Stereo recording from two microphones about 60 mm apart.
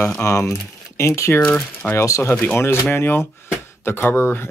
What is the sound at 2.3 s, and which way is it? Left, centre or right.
Speech, left.